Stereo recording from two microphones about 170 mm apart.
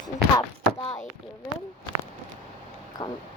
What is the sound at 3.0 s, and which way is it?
Speech, 25° left (ahead or behind).